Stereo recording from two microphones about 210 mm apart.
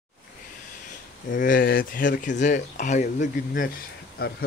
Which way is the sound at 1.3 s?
40° left (ahead or behind).